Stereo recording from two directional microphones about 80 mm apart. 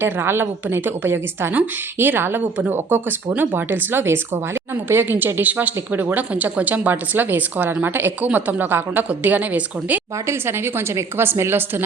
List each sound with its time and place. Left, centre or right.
0.0 s speech: right